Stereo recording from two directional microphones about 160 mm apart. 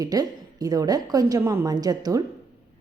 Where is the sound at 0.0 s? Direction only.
25° right (ahead or behind).